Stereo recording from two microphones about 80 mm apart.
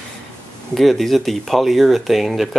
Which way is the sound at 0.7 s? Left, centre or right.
Centre.